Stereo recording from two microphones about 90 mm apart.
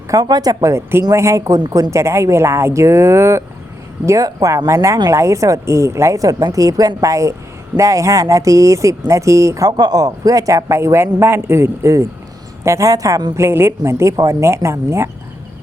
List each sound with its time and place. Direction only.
0.1 s speech: 45° right (ahead or behind)
0.6 s speech: 30° right (ahead or behind)
13.3 s speech: 30° right (ahead or behind)